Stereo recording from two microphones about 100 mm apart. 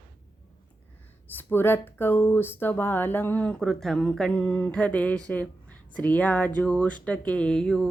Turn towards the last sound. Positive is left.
turn(degrees=5)  # may be behind; listen again after turning